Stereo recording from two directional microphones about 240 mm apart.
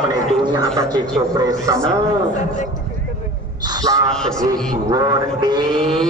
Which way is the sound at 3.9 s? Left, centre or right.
Centre.